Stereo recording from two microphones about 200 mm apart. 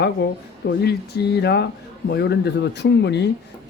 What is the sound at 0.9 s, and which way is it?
Speech, 55° left (ahead or behind).